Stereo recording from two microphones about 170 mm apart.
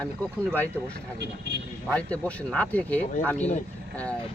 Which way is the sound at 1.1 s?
90° right.